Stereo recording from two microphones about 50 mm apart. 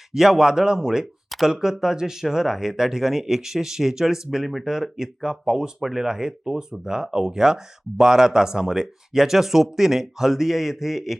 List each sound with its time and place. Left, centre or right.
0.1 s speech: centre